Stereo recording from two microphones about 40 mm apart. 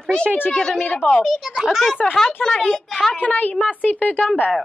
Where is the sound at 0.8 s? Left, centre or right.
Left.